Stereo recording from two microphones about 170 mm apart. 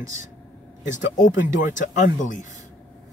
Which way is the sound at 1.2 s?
50° left (ahead or behind).